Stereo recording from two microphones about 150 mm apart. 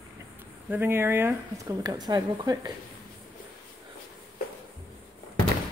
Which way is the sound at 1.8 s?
25° right (ahead or behind).